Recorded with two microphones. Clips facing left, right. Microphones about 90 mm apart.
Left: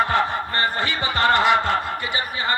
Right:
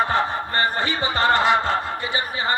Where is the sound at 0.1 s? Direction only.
30° right (ahead or behind).